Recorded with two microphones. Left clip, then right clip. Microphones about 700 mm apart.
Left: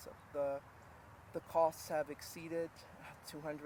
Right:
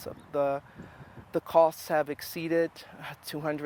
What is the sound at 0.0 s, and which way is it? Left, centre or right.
Speech, right.